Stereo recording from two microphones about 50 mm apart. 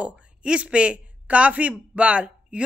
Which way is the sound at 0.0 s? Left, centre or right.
Right.